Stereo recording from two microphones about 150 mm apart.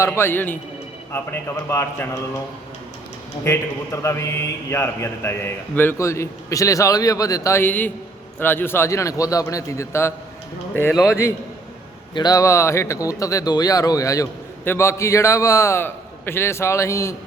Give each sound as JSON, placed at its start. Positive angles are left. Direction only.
{"t": 0.0, "sound": "a man's voice", "side_deg": 15}
{"t": 3.4, "sound": "a man's voice", "side_deg": 20}